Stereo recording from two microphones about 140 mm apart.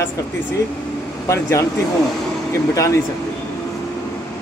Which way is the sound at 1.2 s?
20° left (ahead or behind).